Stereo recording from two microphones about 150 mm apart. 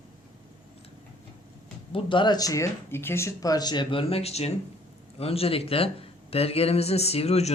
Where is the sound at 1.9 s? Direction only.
35° left (ahead or behind).